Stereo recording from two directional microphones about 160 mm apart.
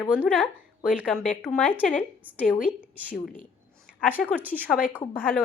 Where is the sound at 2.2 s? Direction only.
10° right (ahead or behind).